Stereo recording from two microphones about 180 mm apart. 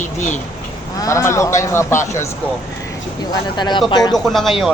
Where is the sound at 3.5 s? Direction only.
25° left (ahead or behind).